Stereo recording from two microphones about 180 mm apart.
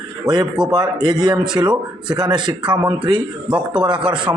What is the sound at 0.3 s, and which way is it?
Speech, 5° right (ahead or behind).